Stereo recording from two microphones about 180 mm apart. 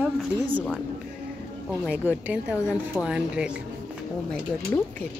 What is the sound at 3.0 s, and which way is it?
Speech, 5° right (ahead or behind).